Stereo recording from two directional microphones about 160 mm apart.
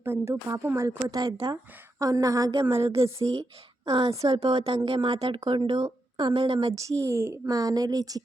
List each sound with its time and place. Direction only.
0.0 s speech: 15° right (ahead or behind)
3.0 s speech: 35° right (ahead or behind)
3.8 s speech: 20° right (ahead or behind)
4.3 s speech: 35° right (ahead or behind)
6.7 s speech: 20° right (ahead or behind)